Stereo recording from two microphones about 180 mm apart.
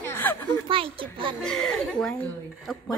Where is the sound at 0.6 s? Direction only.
30° right (ahead or behind).